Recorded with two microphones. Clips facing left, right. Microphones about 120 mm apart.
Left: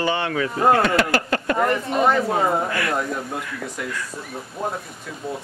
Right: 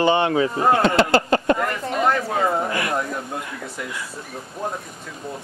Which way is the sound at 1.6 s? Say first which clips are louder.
Left 3 dB; 20° left (ahead or behind).